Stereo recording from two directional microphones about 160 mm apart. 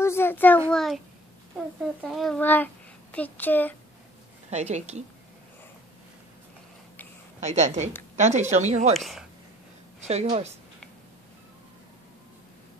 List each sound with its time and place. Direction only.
0.0 s a sound: 15° left (ahead or behind)
2.0 s a sound: centre (ahead or behind)
4.5 s a woman's voice: 45° right (ahead or behind)
7.4 s a woman's voice: 45° right (ahead or behind)
8.9 s speech: centre (ahead or behind)
10.0 s a woman's voice: 40° right (ahead or behind)